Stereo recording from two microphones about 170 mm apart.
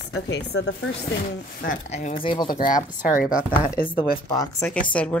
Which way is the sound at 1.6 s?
50° left (ahead or behind).